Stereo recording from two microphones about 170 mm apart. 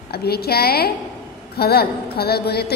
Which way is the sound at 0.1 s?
70° left (ahead or behind).